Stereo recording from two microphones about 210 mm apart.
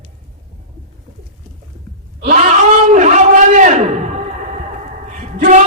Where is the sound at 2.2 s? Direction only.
35° right (ahead or behind).